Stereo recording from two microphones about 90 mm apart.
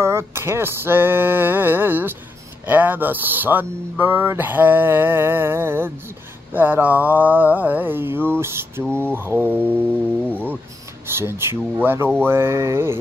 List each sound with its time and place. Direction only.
0.0 s speech: 30° right (ahead or behind)
11.1 s speech: 25° right (ahead or behind)